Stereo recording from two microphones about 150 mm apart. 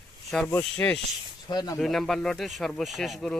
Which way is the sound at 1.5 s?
25° left (ahead or behind).